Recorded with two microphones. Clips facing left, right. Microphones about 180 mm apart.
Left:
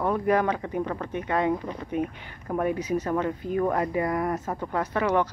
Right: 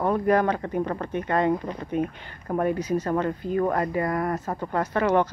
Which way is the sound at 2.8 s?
35° right (ahead or behind).